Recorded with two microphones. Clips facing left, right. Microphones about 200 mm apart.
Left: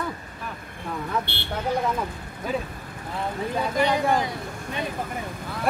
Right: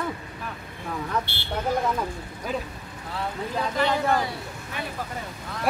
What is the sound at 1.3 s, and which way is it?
Speech, 60° left (ahead or behind).